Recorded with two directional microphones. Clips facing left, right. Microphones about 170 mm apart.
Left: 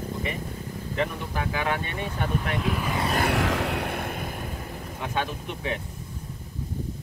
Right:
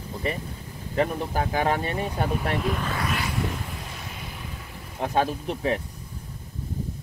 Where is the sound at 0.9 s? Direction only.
40° right (ahead or behind).